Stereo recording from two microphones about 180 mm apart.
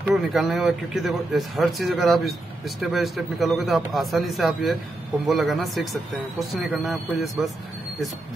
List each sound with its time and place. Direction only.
0.1 s speech: centre (ahead or behind)